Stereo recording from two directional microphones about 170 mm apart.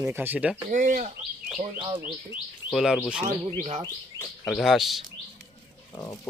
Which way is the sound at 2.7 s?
Centre (ahead or behind).